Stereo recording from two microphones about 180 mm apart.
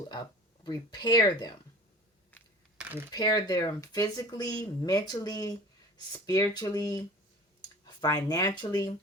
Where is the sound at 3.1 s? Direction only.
20° left (ahead or behind).